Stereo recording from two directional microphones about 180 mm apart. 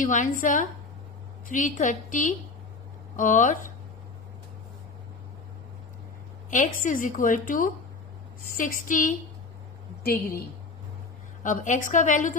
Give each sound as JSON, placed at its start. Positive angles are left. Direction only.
{"t": 0.0, "sound": "a woman's voice", "side_deg": 45}
{"t": 6.5, "sound": "a woman's voice", "side_deg": 45}
{"t": 10.0, "sound": "speech", "side_deg": 60}
{"t": 11.4, "sound": "a woman's voice", "side_deg": 45}